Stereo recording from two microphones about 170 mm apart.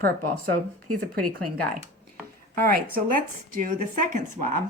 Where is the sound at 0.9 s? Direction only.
60° right (ahead or behind).